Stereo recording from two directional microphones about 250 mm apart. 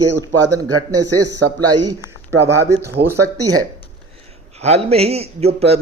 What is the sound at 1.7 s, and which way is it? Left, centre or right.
A man's voice, centre.